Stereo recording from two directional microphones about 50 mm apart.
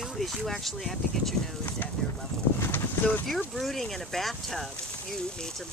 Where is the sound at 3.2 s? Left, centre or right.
Centre.